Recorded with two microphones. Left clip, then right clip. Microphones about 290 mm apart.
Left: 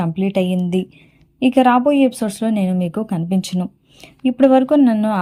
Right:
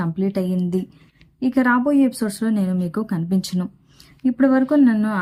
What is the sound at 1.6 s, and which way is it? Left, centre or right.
A woman's voice, centre.